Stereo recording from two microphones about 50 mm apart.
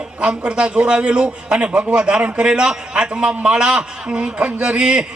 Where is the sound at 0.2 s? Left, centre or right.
Right.